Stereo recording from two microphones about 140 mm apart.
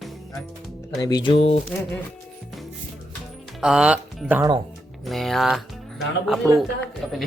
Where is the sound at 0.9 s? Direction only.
30° left (ahead or behind).